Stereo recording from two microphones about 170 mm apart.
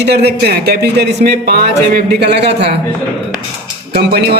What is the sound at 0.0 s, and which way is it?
A man's voice, 75° right (ahead or behind).